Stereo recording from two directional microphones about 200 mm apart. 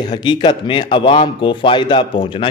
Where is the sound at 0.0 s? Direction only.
20° left (ahead or behind).